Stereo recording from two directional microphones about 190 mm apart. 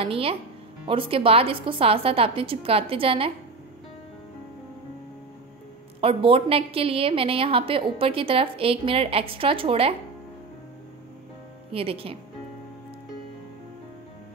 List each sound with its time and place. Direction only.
0.0 s a woman's voice: 30° right (ahead or behind)
5.9 s a woman's voice: 30° right (ahead or behind)
11.7 s a woman's voice: 30° right (ahead or behind)